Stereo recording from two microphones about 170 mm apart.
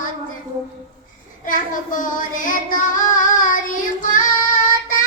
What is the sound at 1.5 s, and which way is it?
Child singing, 50° left (ahead or behind).